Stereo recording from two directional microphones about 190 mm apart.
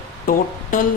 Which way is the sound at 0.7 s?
45° left (ahead or behind).